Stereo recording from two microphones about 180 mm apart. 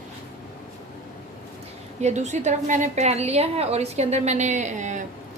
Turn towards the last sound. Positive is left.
turn(degrees=-40)  # may be behind; listen again after turning